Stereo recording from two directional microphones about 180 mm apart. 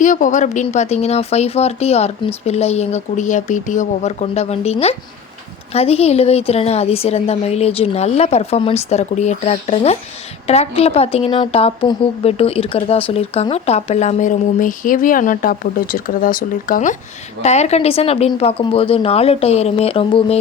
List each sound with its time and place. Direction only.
0.0 s a woman's voice: 45° left (ahead or behind)